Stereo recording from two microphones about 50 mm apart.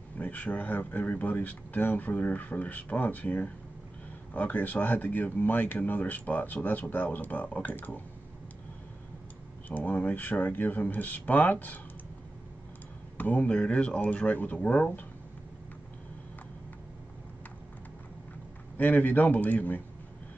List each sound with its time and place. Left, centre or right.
0.2 s speech: left
9.7 s speech: left
13.2 s speech: left
18.8 s speech: left